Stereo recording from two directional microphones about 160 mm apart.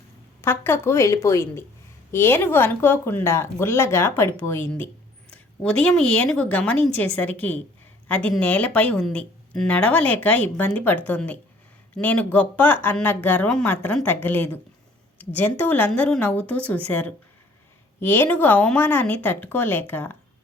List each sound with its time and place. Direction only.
0.4 s speech: 15° left (ahead or behind)
5.8 s speech: 10° left (ahead or behind)